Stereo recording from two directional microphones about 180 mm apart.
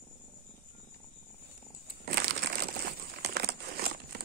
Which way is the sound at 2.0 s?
60° right (ahead or behind).